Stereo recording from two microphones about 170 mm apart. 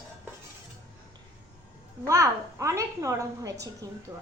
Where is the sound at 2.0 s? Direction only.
20° right (ahead or behind).